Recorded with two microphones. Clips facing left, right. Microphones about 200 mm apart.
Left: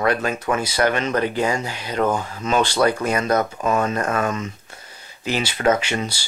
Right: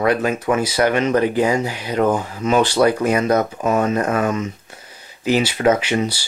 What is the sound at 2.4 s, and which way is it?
Speech, 10° right (ahead or behind).